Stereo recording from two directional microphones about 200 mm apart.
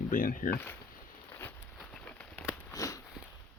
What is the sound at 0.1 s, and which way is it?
Speech, 45° left (ahead or behind).